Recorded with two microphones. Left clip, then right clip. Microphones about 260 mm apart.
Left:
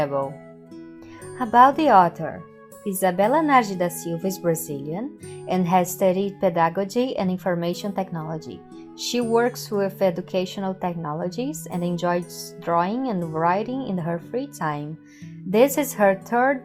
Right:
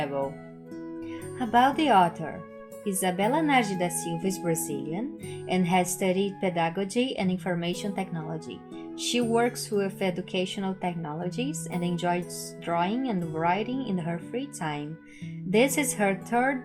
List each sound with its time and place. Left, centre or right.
0.0 s music: left
1.4 s speech: left